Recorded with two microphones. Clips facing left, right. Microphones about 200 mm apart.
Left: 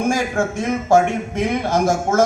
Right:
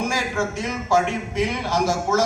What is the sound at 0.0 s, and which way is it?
A man's voice, 55° left (ahead or behind).